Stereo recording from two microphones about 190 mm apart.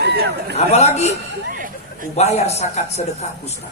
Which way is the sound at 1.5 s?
45° right (ahead or behind).